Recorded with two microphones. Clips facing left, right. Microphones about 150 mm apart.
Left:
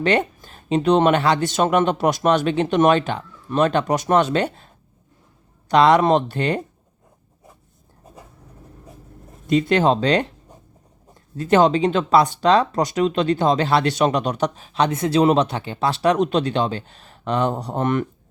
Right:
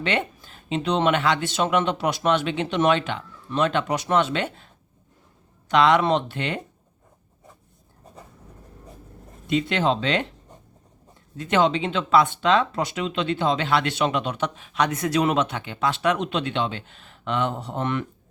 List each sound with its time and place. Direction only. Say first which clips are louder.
0.0 s speech: left 6 dB; 45° left (ahead or behind)
9.5 s speech: left 5 dB; 45° left (ahead or behind)
11.3 s speech: left 5 dB; 40° left (ahead or behind)